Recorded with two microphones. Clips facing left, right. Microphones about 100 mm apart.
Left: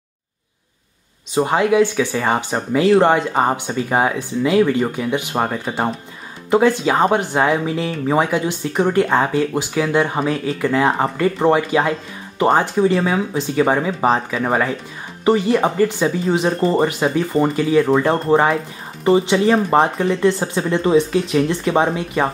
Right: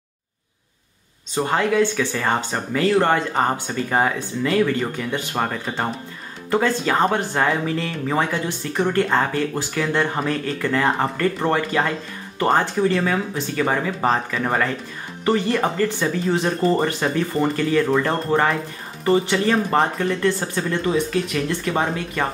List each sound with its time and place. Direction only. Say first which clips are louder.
1.3 s speech: left 4 dB; 15° left (ahead or behind)